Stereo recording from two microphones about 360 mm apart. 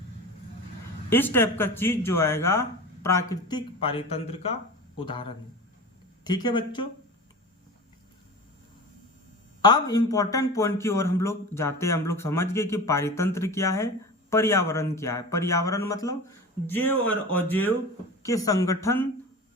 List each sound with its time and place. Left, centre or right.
1.1 s speech: centre
9.6 s speech: centre